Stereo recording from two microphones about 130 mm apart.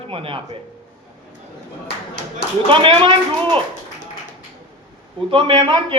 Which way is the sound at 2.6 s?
40° right (ahead or behind).